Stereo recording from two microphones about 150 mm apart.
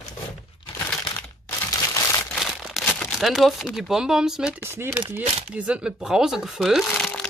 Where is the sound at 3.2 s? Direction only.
Centre (ahead or behind).